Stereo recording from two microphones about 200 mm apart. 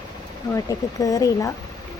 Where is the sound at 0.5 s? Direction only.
15° left (ahead or behind).